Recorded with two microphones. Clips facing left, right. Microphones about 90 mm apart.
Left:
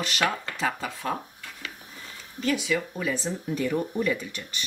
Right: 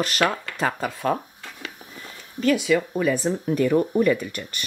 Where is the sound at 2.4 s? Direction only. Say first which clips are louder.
Right 6 dB; 55° right (ahead or behind).